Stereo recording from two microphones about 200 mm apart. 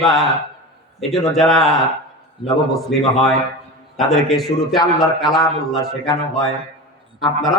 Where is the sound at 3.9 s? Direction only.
Centre (ahead or behind).